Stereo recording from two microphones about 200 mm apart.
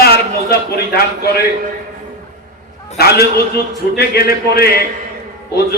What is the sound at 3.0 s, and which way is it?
A man's voice, 50° left (ahead or behind).